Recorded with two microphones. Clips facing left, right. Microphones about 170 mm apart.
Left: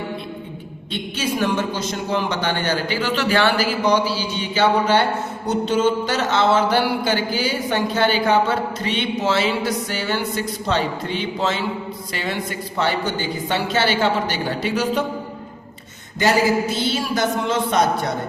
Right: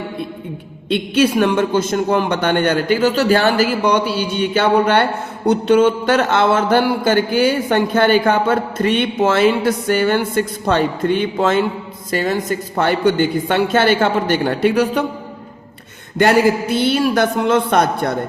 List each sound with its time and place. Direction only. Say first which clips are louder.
0.9 s a man's voice: right 10 dB; 65° right (ahead or behind)
5.5 s a sound: right 6 dB; 60° right (ahead or behind)
16.1 s a man's voice: right 4 dB; 60° right (ahead or behind)